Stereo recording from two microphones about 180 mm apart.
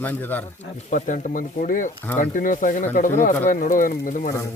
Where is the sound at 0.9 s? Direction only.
45° left (ahead or behind).